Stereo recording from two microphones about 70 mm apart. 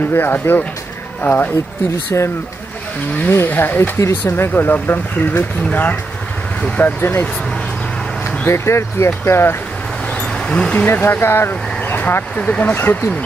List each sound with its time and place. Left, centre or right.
0.1 s speech: left
8.5 s speech: left
10.1 s a sound: centre
10.9 s speech: left